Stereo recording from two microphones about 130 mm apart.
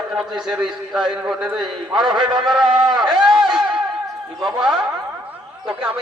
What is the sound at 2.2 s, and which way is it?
Speech, 35° right (ahead or behind).